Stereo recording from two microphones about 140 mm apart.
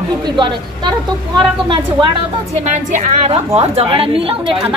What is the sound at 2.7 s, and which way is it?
Speech, 60° right (ahead or behind).